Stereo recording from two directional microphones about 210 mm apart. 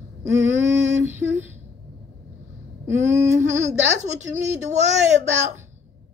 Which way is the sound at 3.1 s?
35° right (ahead or behind).